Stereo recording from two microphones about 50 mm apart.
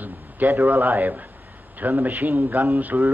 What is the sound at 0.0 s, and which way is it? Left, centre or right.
A man's voice, right.